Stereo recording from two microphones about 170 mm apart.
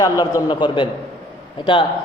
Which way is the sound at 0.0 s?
20° left (ahead or behind).